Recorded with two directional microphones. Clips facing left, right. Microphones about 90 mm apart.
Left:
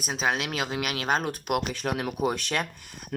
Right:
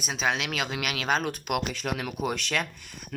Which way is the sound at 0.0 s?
35° left (ahead or behind).